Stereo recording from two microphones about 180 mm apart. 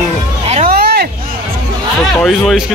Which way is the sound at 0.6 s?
60° right (ahead or behind).